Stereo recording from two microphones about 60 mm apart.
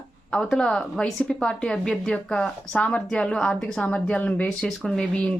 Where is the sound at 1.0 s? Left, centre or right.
Centre.